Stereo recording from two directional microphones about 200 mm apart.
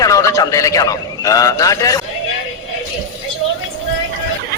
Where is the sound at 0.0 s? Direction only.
15° left (ahead or behind).